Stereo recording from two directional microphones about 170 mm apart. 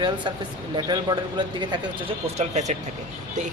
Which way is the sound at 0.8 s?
25° right (ahead or behind).